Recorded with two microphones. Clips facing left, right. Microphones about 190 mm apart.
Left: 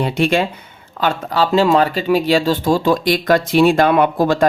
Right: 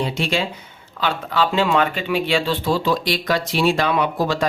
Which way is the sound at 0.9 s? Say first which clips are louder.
Left 4 dB; 45° left (ahead or behind).